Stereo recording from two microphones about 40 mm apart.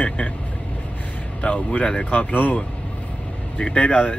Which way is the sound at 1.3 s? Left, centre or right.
Left.